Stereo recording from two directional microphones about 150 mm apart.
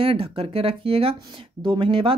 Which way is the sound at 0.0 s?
40° right (ahead or behind).